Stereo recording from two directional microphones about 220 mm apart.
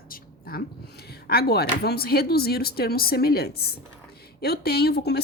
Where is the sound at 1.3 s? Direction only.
45° left (ahead or behind).